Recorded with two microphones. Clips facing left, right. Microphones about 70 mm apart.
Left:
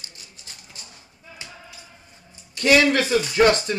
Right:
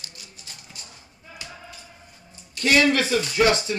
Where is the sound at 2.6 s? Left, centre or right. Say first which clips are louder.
Left 2 dB; left.